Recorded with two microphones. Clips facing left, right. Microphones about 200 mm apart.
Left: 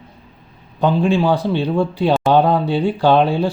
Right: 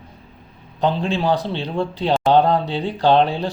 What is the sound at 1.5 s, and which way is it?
Speech, 15° left (ahead or behind).